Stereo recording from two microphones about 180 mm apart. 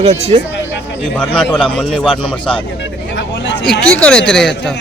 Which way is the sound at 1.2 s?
5° left (ahead or behind).